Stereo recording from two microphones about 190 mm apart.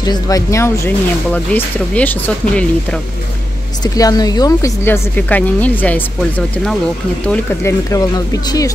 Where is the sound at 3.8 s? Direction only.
20° left (ahead or behind).